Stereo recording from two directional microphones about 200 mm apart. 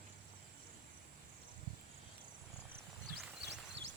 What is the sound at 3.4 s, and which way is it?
Horse, 60° right (ahead or behind).